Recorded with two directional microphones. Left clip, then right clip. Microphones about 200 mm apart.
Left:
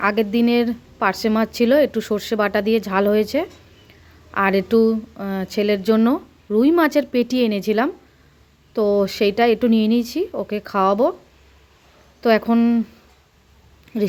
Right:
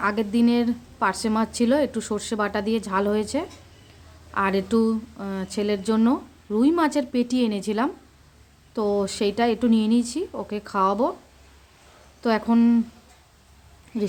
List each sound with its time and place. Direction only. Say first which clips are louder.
0.0 s a woman's voice: left 4 dB; 15° left (ahead or behind)
12.2 s a woman's voice: left 5 dB; 15° left (ahead or behind)
13.9 s a woman's voice: left 5 dB; 15° left (ahead or behind)